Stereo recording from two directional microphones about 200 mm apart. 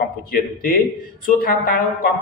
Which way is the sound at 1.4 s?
50° left (ahead or behind).